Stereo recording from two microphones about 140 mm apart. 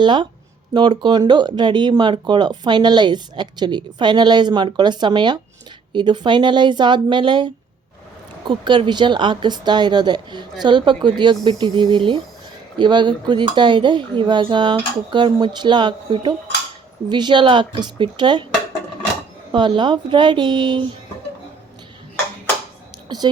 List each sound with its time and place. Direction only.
0.0 s speech: 35° right (ahead or behind)
19.5 s speech: 35° right (ahead or behind)
23.0 s whispering: 30° right (ahead or behind)